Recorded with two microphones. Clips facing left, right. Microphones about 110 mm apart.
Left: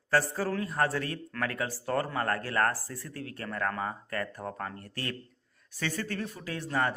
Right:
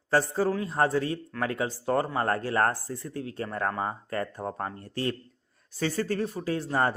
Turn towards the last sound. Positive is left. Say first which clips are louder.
# right 4 dB
turn(degrees=-30)  # may be behind; listen again after turning